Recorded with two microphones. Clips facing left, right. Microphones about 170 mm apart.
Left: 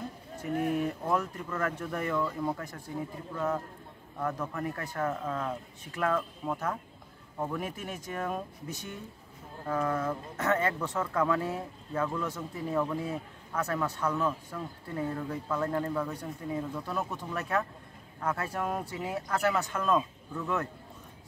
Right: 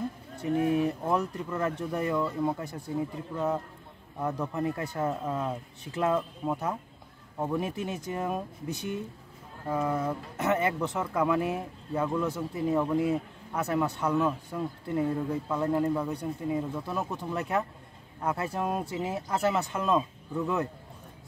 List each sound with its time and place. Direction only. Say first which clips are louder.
0.6 s speech: right 3 dB; 20° right (ahead or behind)
9.7 s speech: right 1 dB; 15° right (ahead or behind)